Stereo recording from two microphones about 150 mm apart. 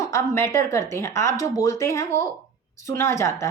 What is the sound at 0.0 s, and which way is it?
Speech, 20° left (ahead or behind).